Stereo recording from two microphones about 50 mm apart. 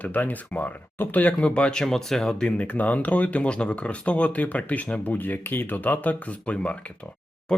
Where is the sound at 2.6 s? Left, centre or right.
Left.